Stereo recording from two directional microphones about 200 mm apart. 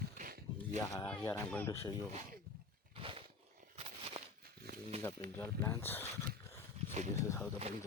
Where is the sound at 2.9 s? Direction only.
25° right (ahead or behind).